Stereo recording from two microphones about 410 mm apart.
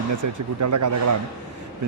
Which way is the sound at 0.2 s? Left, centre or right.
Right.